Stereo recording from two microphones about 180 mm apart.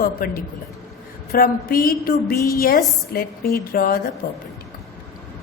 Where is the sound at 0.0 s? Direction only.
55° left (ahead or behind).